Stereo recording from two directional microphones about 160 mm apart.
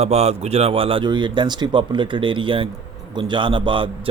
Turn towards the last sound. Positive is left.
turn(degrees=-30)  # may be behind; listen again after turning